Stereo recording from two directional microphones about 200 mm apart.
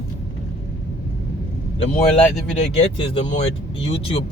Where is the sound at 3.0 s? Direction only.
30° left (ahead or behind).